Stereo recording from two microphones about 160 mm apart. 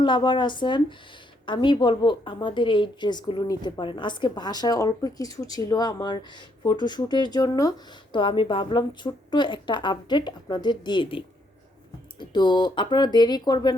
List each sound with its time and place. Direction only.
0.0 s a woman's voice: 30° left (ahead or behind)
12.3 s a woman's voice: 30° left (ahead or behind)